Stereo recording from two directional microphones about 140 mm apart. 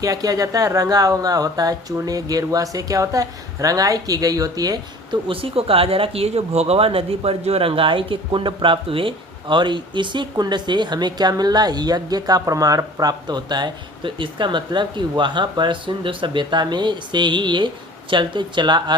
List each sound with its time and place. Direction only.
0.0 s speech: 25° right (ahead or behind)
5.3 s speech: 40° right (ahead or behind)